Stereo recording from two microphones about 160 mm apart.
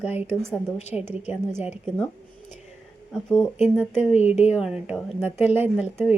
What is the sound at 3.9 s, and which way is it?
Speech, 45° left (ahead or behind).